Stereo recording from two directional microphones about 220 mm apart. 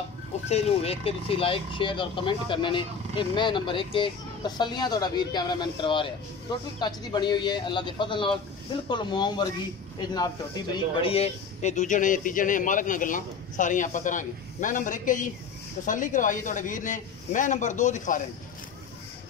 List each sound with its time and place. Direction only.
0.5 s a man's voice: 25° left (ahead or behind)